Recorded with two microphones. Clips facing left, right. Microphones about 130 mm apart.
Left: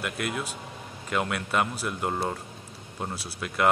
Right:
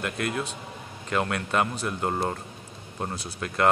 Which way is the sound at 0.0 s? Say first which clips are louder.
Right 2 dB; 5° left (ahead or behind).